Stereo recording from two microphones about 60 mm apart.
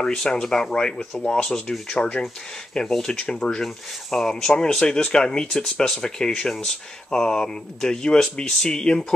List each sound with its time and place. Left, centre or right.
0.0 s speech: centre